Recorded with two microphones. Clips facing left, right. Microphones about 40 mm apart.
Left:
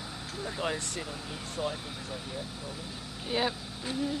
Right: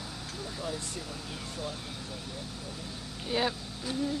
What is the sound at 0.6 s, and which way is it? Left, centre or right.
Speech, left.